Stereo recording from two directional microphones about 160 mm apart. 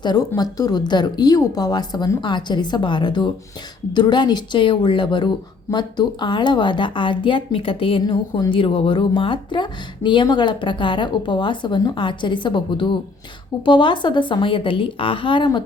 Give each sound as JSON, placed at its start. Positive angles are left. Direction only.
{"t": 0.0, "sound": "speech", "side_deg": 25}